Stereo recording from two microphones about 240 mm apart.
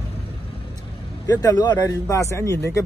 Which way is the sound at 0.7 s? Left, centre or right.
Centre.